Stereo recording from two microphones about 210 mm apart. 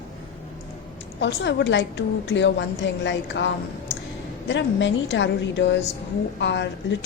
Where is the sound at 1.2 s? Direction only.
55° left (ahead or behind).